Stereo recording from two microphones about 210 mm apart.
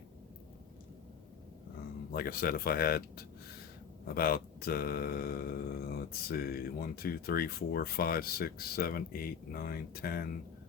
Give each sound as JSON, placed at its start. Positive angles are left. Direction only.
{"t": 2.1, "sound": "speech", "side_deg": 45}